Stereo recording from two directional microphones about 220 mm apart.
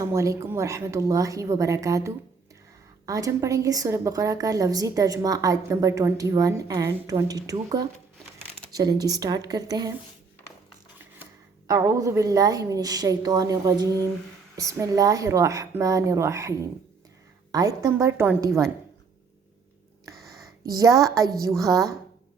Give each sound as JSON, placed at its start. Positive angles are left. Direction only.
{"t": 0.0, "sound": "a woman's voice", "side_deg": -15}
{"t": 11.7, "sound": "a woman's voice", "side_deg": -15}
{"t": 20.1, "sound": "a sound", "side_deg": 0}
{"t": 20.7, "sound": "a woman's voice", "side_deg": -15}